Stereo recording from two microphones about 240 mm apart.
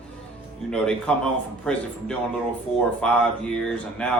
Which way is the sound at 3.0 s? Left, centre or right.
Centre.